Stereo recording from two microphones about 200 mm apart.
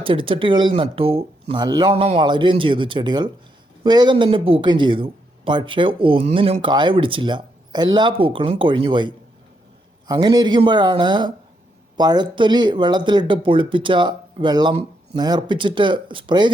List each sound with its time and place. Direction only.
0.0 s speech: 25° right (ahead or behind)